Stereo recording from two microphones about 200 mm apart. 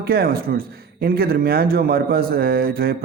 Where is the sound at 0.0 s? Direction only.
50° right (ahead or behind).